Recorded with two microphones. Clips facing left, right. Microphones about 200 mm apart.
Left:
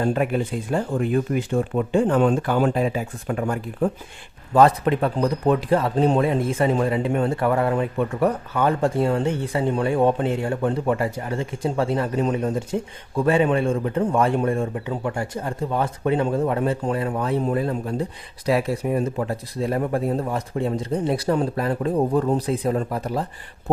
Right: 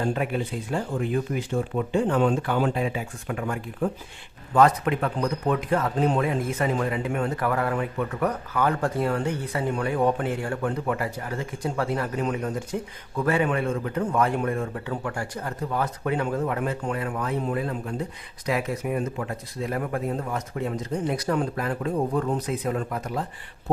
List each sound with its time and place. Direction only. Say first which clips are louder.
0.7 s speech: left 4 dB; 50° left (ahead or behind); by 23.2 s 35° left (ahead or behind)